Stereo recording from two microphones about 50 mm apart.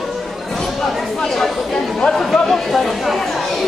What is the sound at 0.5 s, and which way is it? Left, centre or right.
Speech, centre.